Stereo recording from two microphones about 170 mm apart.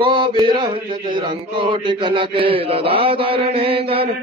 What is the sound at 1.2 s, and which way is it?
Mantra, 30° right (ahead or behind).